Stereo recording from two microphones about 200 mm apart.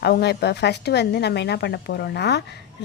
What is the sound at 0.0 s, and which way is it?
Speech, 55° left (ahead or behind).